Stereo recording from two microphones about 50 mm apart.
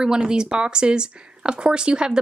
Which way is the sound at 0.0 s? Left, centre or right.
Centre.